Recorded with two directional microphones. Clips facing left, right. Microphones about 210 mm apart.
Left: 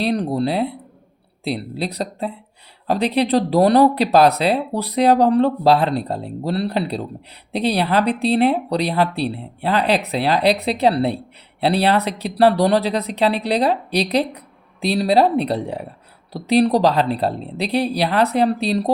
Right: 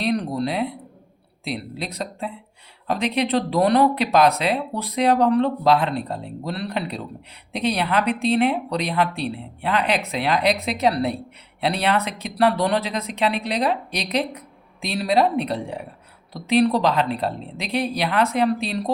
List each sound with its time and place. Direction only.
0.0 s speech: 35° left (ahead or behind)